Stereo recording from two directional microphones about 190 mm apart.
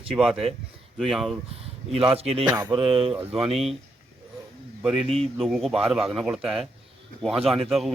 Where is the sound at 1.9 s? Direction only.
30° right (ahead or behind).